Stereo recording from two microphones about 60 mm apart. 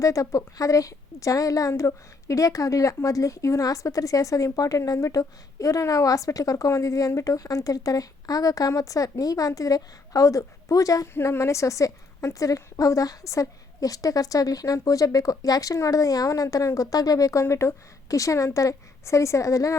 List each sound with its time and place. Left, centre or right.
0.0 s a woman's voice: left
11.1 s a woman's voice: left
17.4 s a woman's voice: left